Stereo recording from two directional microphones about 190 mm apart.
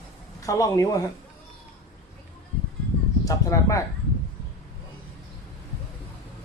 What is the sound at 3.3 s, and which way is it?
Speech, 15° left (ahead or behind).